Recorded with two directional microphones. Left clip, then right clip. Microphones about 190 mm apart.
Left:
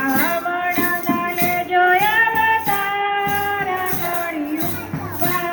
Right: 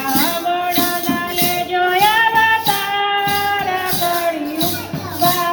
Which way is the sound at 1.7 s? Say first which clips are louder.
Right 1 dB; 50° left (ahead or behind).